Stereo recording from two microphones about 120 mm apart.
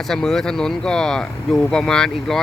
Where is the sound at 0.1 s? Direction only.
5° left (ahead or behind).